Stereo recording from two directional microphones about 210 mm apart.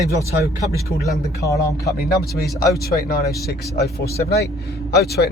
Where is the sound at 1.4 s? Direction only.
15° left (ahead or behind).